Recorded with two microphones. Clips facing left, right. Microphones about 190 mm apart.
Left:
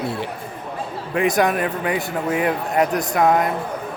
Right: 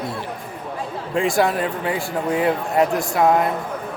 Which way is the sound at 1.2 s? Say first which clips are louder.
Left 1 dB; 20° left (ahead or behind).